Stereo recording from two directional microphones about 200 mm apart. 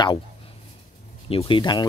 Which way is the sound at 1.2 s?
25° left (ahead or behind).